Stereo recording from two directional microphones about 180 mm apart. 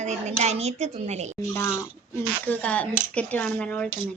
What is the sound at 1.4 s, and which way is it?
Speech, 15° left (ahead or behind).